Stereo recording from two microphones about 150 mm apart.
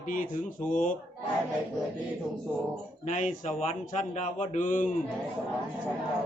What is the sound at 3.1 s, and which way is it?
Speech, 60° left (ahead or behind).